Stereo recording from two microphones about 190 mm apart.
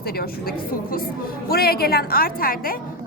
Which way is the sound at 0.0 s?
55° left (ahead or behind).